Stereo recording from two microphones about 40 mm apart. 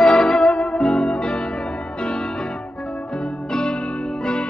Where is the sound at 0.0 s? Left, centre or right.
Centre.